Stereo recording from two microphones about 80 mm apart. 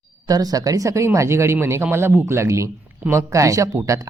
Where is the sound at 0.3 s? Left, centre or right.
Right.